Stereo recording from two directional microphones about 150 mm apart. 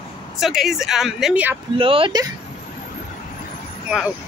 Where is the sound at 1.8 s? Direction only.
35° right (ahead or behind).